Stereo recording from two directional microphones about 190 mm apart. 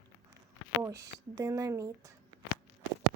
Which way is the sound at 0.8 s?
15° right (ahead or behind).